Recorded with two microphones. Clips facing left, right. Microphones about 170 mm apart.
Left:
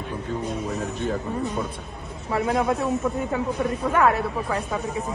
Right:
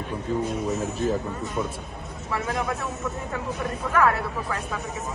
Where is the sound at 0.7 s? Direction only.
5° right (ahead or behind).